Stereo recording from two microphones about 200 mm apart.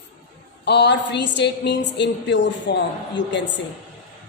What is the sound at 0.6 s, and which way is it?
A woman's voice, 60° left (ahead or behind).